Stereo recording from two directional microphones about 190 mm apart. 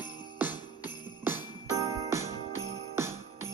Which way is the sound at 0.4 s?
10° right (ahead or behind).